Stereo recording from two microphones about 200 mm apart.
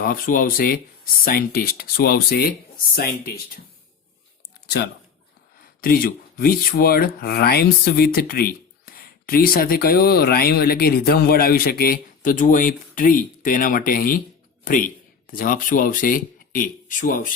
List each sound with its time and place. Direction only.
0.0 s speech: 45° left (ahead or behind)
4.6 s speech: 55° left (ahead or behind)
15.3 s speech: 45° left (ahead or behind)